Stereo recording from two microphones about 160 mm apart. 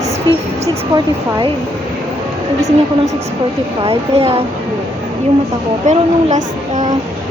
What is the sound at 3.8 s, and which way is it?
Speech, 40° right (ahead or behind).